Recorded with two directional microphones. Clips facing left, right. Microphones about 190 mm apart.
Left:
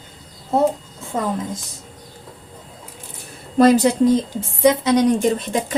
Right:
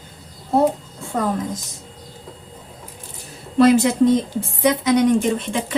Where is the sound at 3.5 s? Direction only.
40° left (ahead or behind).